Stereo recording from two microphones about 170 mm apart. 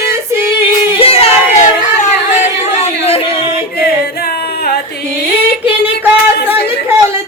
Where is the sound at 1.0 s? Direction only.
35° left (ahead or behind).